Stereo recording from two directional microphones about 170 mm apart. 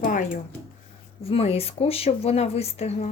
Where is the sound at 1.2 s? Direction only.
35° left (ahead or behind).